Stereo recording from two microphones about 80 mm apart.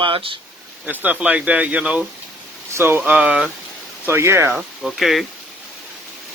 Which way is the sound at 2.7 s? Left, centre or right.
Right.